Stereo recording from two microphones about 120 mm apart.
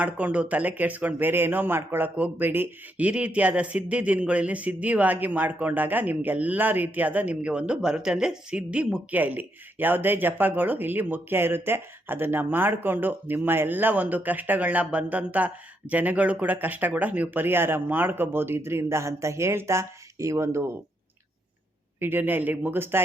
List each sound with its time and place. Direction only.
0.0 s speech: 10° right (ahead or behind)
22.0 s speech: 15° right (ahead or behind)